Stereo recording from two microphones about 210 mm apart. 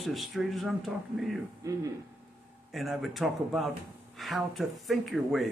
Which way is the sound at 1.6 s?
15° right (ahead or behind).